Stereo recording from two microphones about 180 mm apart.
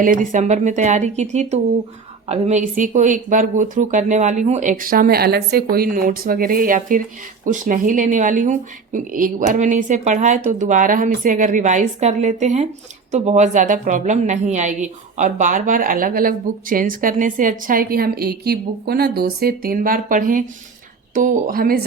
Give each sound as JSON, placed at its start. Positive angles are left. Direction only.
{"t": 0.0, "sound": "a woman's voice", "side_deg": -45}